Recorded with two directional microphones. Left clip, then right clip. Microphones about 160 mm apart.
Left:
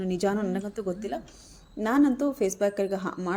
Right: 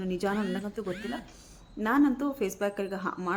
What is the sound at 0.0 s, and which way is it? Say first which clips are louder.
A woman's voice: left 3 dB; 25° left (ahead or behind).